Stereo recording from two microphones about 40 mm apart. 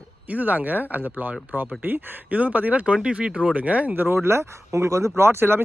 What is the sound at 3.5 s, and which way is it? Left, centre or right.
Speech, right.